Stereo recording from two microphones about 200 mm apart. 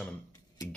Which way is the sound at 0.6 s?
15° left (ahead or behind).